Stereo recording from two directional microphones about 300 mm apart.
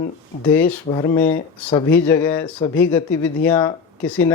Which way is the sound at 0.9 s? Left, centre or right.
Centre.